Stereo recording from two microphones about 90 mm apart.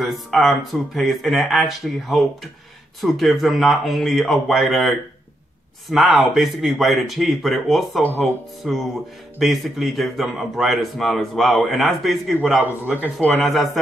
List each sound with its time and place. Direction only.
0.0 s a man's voice: centre (ahead or behind)
12.8 s speech: 15° right (ahead or behind)
13.4 s a man's voice: centre (ahead or behind)